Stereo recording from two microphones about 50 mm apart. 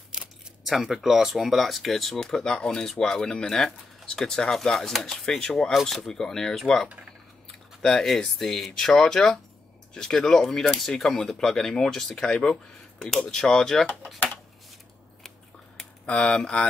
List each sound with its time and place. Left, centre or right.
0.7 s speech: centre
2.2 s speech: centre
7.8 s speech: centre
16.1 s speech: left